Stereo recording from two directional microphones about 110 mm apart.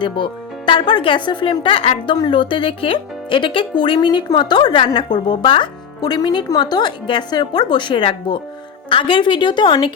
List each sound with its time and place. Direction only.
0.0 s speech: 45° left (ahead or behind)
2.1 s speech: 45° left (ahead or behind)